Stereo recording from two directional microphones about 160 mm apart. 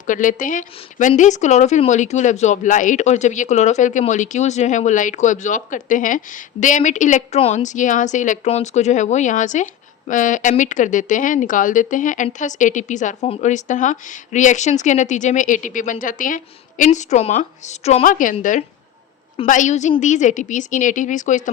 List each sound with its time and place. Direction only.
0.1 s speech: 55° left (ahead or behind)
19.5 s speech: 50° left (ahead or behind)